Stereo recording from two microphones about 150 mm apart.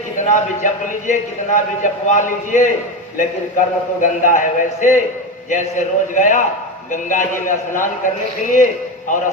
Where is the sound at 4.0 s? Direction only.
60° left (ahead or behind).